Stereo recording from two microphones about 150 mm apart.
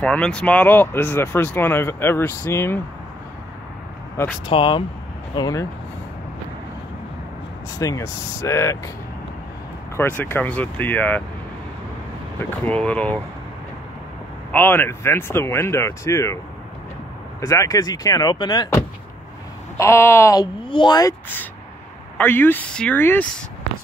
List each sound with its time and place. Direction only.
0.0 s speech: 5° left (ahead or behind)
4.5 s speech: 35° left (ahead or behind)
5.3 s speech: 25° left (ahead or behind)
7.8 s speech: 20° left (ahead or behind)
9.9 s speech: 15° left (ahead or behind)
12.4 s speech: 10° left (ahead or behind)
14.5 s speech: 15° left (ahead or behind)
17.4 s speech: 20° left (ahead or behind)
19.8 s speech: 15° left (ahead or behind)
20.6 s speech: 30° left (ahead or behind)
22.1 s speech: 15° left (ahead or behind)